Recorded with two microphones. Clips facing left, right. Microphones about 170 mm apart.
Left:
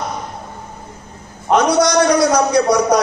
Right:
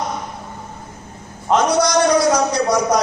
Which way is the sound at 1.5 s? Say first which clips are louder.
Left 2 dB; 65° left (ahead or behind).